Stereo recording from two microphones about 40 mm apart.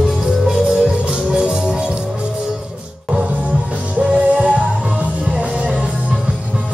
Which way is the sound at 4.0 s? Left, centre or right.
Right.